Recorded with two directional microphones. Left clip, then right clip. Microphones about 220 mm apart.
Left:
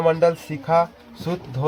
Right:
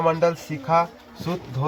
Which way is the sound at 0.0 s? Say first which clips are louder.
Left 2 dB; 40° left (ahead or behind).